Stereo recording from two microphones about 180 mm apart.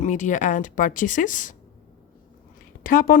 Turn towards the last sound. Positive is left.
turn(degrees=50)  # may be behind; listen again after turning